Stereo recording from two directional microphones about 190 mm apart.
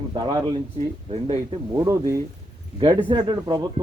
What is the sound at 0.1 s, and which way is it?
A man's voice, 25° right (ahead or behind).